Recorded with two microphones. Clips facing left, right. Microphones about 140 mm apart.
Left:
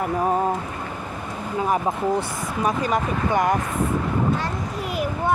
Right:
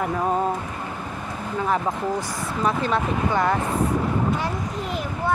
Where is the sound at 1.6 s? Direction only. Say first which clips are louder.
Left 2 dB; 20° left (ahead or behind).